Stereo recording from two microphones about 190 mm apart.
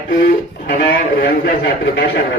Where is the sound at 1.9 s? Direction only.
80° left.